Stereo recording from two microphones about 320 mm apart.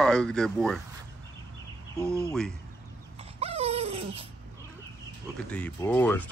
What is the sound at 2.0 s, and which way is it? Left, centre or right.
Speech, centre.